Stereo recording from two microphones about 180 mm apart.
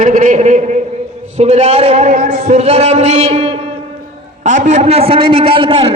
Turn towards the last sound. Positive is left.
turn(degrees=-30)  # may be behind; listen again after turning